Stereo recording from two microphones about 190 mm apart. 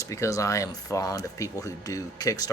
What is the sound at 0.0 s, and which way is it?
Speech, 15° left (ahead or behind).